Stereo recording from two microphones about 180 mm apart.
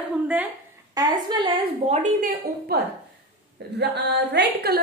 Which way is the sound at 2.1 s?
50° right (ahead or behind).